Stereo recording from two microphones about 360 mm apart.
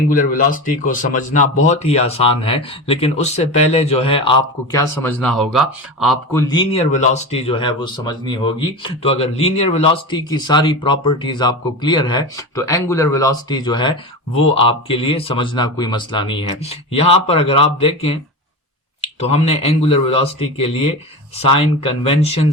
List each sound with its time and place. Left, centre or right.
0.1 s speech: left; by 6.4 s centre
6.5 s speech: centre